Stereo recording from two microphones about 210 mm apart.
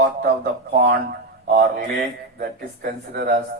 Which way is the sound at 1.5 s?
35° right (ahead or behind).